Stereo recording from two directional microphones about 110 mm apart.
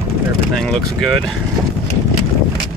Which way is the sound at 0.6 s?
5° left (ahead or behind).